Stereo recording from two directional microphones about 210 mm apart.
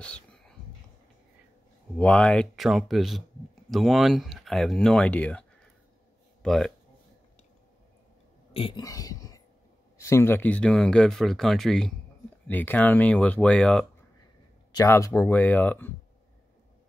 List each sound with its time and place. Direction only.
0.0 s whispering: 5° left (ahead or behind)
2.0 s speech: 5° left (ahead or behind)
8.5 s speech: 20° left (ahead or behind); by 13.8 s 5° left (ahead or behind)
14.7 s speech: 15° left (ahead or behind)